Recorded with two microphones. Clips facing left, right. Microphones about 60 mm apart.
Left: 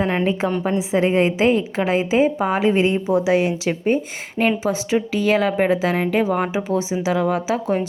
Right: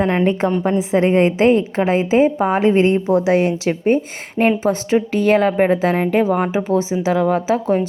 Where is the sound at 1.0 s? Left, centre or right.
Centre.